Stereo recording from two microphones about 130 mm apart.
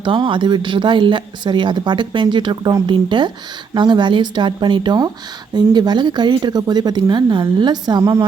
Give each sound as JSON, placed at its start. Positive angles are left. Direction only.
{"t": 0.0, "sound": "speech", "side_deg": -40}